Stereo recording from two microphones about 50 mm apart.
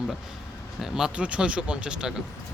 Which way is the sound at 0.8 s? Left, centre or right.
Centre.